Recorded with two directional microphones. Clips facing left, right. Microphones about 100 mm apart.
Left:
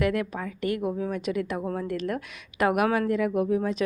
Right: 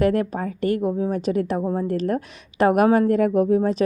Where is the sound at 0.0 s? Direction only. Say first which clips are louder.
Right 6 dB; 35° right (ahead or behind).